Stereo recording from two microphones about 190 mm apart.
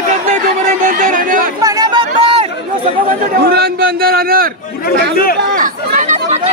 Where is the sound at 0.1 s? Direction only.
40° right (ahead or behind).